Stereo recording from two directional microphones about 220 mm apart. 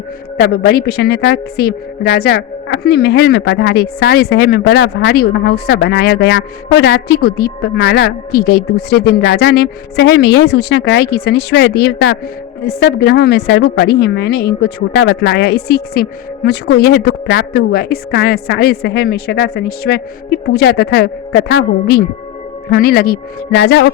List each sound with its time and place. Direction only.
0.3 s a woman's voice: 45° left (ahead or behind)